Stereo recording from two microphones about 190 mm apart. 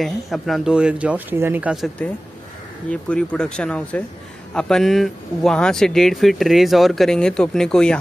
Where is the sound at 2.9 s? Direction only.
5° left (ahead or behind).